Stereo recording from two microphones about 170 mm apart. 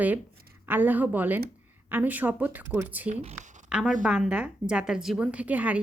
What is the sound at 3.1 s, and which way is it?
Speech, 40° right (ahead or behind).